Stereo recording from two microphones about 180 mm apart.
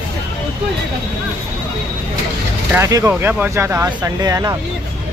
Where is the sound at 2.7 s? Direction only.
15° right (ahead or behind).